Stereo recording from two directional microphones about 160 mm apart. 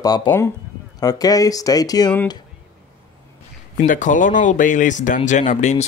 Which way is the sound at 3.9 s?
55° left (ahead or behind).